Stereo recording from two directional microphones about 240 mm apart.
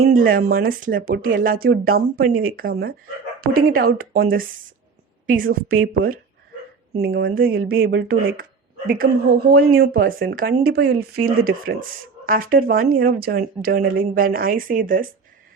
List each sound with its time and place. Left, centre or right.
0.0 s speech: right
2.3 s speech: right
2.6 s speech: right
7.0 s speech: right